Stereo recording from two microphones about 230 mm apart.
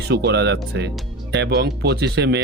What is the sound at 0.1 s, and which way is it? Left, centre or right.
Speech, right.